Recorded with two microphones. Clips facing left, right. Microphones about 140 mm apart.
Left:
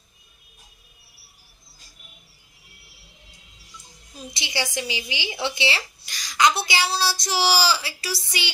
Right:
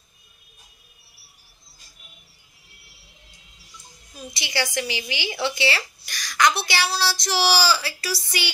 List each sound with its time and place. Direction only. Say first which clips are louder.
4.3 s speech: right 2 dB; 20° left (ahead or behind)